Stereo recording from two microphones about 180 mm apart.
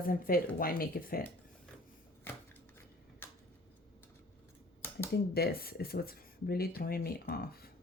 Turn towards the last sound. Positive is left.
turn(degrees=55)  # may be behind; listen again after turning